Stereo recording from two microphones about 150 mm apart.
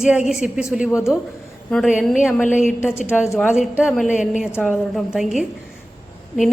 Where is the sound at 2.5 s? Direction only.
55° left (ahead or behind).